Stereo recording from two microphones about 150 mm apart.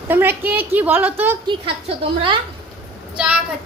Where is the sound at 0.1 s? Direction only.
15° right (ahead or behind).